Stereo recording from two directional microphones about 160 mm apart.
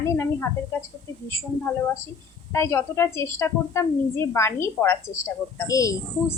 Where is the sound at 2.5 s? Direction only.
15° left (ahead or behind).